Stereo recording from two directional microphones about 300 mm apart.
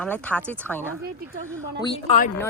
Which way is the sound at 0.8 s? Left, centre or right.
Centre.